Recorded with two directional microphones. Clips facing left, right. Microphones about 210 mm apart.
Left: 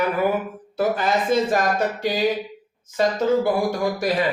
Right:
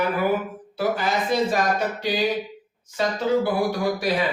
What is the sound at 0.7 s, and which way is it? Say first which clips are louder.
Speech: left 2 dB; 50° left (ahead or behind).